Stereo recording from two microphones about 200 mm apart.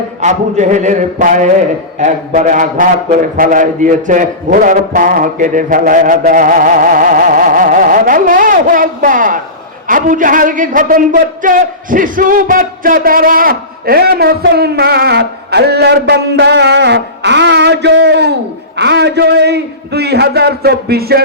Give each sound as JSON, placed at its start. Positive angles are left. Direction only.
{"t": 0.2, "sound": "a man's voice", "side_deg": -35}